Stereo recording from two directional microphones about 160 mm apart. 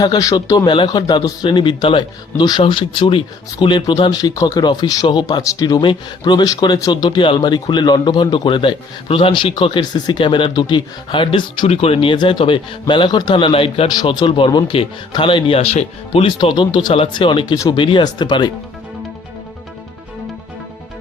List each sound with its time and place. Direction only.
0.0 s a man's voice: 25° left (ahead or behind)